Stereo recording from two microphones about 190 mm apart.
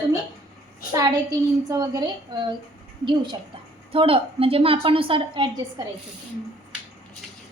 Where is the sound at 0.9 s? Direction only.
20° right (ahead or behind).